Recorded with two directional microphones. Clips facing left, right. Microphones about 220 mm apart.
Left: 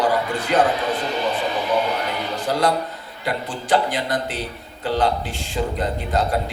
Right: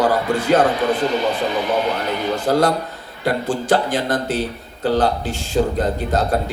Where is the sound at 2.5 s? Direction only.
45° right (ahead or behind).